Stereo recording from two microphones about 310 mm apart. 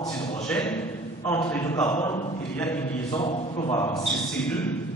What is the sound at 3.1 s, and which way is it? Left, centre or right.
A man's voice, centre.